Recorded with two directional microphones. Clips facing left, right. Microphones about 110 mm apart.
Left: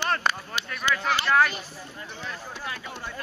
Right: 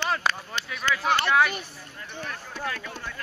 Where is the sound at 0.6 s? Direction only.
10° left (ahead or behind).